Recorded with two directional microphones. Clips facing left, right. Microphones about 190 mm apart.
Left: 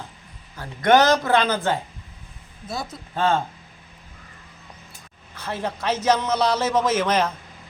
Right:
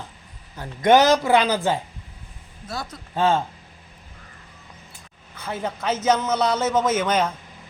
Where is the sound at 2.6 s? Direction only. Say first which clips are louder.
Left 1 dB; 10° left (ahead or behind).